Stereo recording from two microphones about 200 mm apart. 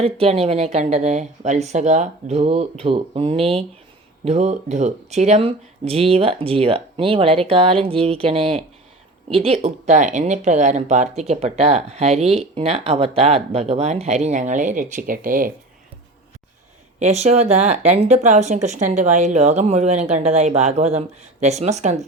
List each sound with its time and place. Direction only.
0.0 s speech: 30° right (ahead or behind)
17.0 s speech: 35° right (ahead or behind)